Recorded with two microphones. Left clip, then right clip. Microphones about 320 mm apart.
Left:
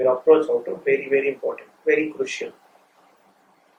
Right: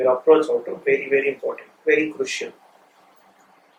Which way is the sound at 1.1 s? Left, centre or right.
Centre.